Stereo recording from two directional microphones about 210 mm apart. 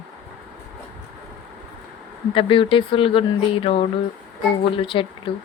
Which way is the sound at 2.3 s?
25° left (ahead or behind).